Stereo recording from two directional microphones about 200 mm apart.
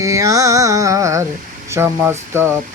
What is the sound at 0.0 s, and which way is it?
Music, 15° right (ahead or behind).